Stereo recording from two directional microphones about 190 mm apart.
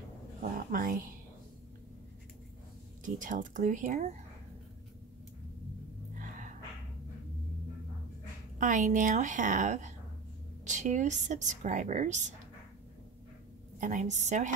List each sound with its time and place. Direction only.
0.4 s speech: 50° right (ahead or behind)
3.2 s a woman's voice: 40° right (ahead or behind)
8.5 s a woman's voice: 40° right (ahead or behind)
13.7 s a woman's voice: 40° right (ahead or behind)